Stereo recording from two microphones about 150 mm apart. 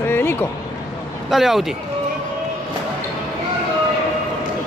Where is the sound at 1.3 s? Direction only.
Centre (ahead or behind).